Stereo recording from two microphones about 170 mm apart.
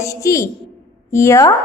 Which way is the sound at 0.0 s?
20° left (ahead or behind).